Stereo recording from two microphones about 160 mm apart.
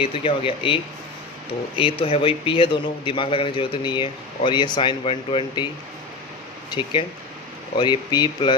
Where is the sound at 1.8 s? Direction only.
35° left (ahead or behind).